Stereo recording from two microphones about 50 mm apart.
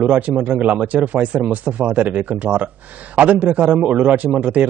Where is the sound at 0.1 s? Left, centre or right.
Right.